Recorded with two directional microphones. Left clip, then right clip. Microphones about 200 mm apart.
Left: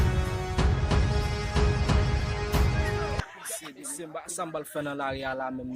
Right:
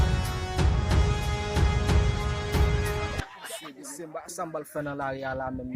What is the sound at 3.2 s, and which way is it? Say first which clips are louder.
Music: even; 55° right (ahead or behind).